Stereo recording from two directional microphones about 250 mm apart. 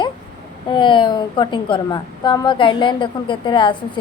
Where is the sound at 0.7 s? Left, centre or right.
Centre.